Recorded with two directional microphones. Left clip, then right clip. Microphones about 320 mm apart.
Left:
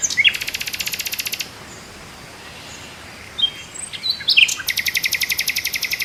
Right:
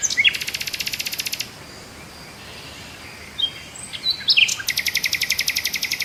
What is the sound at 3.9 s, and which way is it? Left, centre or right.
Bird, centre.